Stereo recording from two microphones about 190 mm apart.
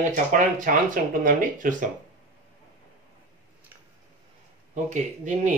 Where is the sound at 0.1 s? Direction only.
40° right (ahead or behind).